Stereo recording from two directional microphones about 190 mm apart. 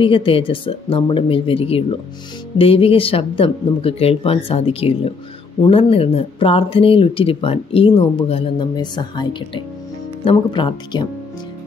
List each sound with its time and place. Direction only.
0.0 s speech: 30° left (ahead or behind)